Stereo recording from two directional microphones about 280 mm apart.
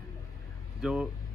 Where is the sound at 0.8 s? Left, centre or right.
Centre.